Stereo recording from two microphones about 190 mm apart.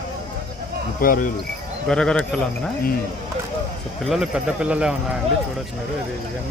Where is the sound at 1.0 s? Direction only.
50° left (ahead or behind).